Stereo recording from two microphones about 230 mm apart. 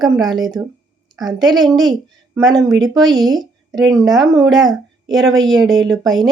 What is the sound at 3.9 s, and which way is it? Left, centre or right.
Speech, centre.